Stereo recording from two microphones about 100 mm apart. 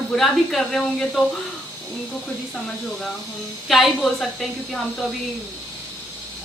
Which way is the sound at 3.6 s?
Centre (ahead or behind).